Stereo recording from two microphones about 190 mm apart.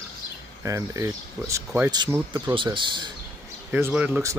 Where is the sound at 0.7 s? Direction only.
15° right (ahead or behind).